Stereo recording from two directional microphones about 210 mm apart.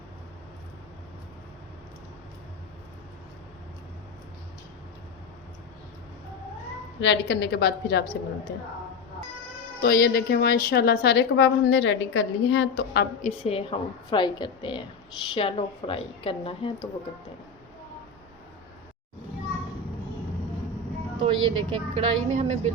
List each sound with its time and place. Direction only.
7.0 s a woman's voice: 55° left (ahead or behind)
9.8 s a woman's voice: 50° left (ahead or behind)
13.2 s speech: 25° left (ahead or behind)
21.2 s a woman's voice: 25° right (ahead or behind)